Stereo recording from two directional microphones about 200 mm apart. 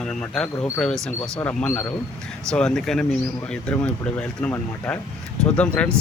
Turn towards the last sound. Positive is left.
turn(degrees=5)  # may be behind; listen again after turning